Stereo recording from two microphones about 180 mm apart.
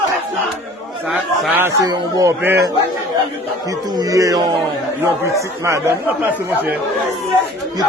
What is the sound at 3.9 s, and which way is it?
Speech, 20° right (ahead or behind).